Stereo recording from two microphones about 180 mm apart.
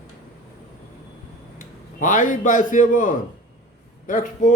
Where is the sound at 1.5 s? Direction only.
45° left (ahead or behind).